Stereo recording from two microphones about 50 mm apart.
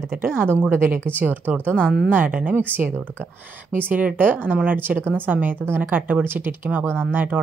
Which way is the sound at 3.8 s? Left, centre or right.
Right.